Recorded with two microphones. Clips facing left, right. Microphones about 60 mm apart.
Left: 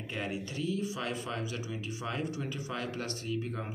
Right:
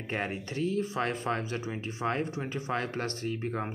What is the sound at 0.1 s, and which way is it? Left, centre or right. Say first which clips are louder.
Speech: right 4 dB; right.